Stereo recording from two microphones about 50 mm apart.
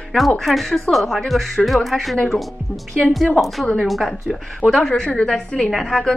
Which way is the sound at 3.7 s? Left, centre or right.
Centre.